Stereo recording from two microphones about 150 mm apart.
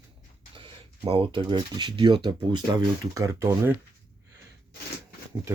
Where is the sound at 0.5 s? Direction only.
35° right (ahead or behind); by 3.8 s 15° right (ahead or behind).